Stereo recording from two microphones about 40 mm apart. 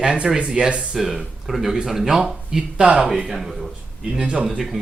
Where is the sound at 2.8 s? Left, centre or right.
Right.